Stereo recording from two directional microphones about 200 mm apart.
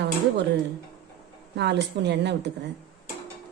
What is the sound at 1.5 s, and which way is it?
Speech, 60° right (ahead or behind).